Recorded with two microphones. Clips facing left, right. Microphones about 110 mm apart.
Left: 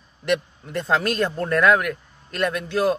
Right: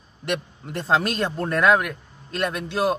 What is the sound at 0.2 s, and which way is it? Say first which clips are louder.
Speech: left 4 dB; 25° right (ahead or behind).